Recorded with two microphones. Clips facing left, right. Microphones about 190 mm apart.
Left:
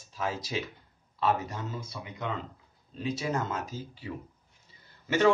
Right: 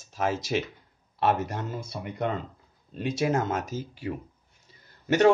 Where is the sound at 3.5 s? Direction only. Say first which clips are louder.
Right 5 dB; 90° right.